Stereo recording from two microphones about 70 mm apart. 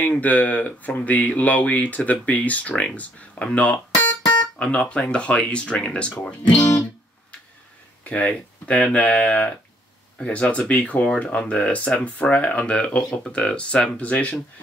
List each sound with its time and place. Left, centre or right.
0.0 s speech: left
8.0 s speech: left